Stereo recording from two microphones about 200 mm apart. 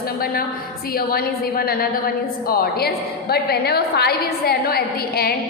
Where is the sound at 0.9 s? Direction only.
50° left (ahead or behind).